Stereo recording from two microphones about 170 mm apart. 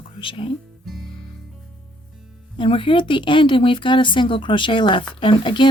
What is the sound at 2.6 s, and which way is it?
Speech, 30° left (ahead or behind).